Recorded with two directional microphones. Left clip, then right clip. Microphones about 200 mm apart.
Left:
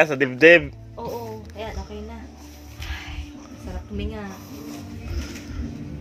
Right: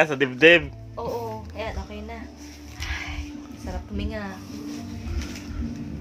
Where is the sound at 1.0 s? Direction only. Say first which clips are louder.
Right 1 dB; 10° right (ahead or behind).